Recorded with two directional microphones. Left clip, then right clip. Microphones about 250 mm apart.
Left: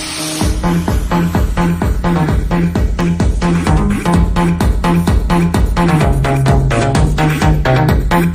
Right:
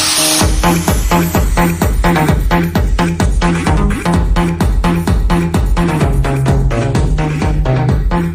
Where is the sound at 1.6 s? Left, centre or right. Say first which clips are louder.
Right 5 dB; right.